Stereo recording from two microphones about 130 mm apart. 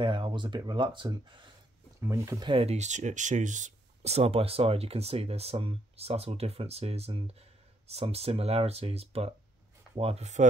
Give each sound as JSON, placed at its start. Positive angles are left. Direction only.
{"t": 0.0, "sound": "speech", "side_deg": -40}
{"t": 2.0, "sound": "speech", "side_deg": -20}
{"t": 2.4, "sound": "speech", "side_deg": -45}